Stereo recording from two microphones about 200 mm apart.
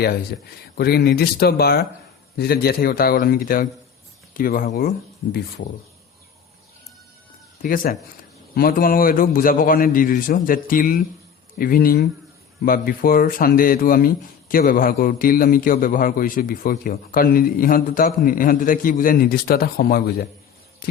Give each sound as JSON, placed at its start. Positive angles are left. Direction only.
{"t": 0.0, "sound": "speech", "side_deg": 50}
{"t": 7.6, "sound": "speech", "side_deg": 45}